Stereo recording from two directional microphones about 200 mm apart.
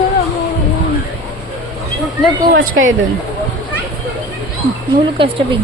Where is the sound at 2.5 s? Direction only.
75° right (ahead or behind).